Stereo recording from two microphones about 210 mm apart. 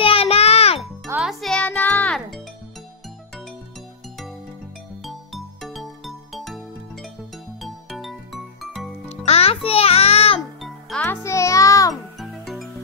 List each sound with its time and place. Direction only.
0.0 s music: 25° left (ahead or behind)
0.7 s music: centre (ahead or behind)
5.0 s music: centre (ahead or behind)
9.1 s music: 30° left (ahead or behind)
10.6 s music: 5° left (ahead or behind)
11.9 s music: centre (ahead or behind)